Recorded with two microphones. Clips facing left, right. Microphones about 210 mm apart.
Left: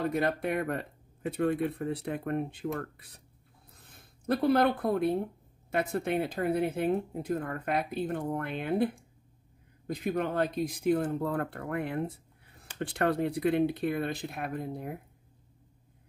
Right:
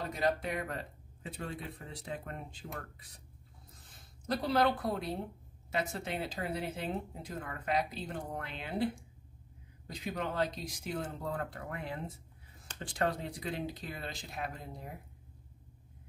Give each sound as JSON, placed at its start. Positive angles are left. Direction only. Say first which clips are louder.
{"t": 0.0, "sound": "speech", "louder": "left 4 dB", "side_deg": 55}